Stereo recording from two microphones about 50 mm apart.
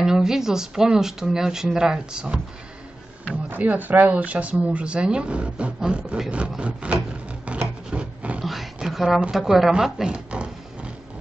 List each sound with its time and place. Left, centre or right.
0.0 s speech: centre
3.4 s speech: right
6.6 s wood: right
8.4 s a sound: centre
9.3 s a woman's voice: centre
10.0 s a sound: centre